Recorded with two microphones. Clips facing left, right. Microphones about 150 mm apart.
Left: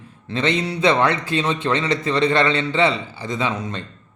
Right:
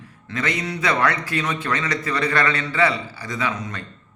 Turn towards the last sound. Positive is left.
turn(degrees=25)  # may be behind; listen again after turning